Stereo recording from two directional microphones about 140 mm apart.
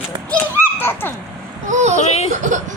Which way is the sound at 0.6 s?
15° left (ahead or behind).